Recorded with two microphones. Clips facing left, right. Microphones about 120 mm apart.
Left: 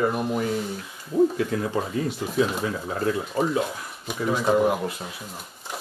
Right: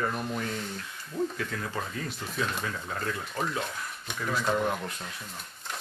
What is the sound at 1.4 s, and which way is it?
Speech, 20° left (ahead or behind).